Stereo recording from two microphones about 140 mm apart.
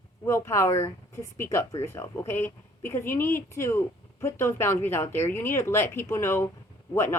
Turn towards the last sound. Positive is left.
turn(degrees=15)  # may be behind; listen again after turning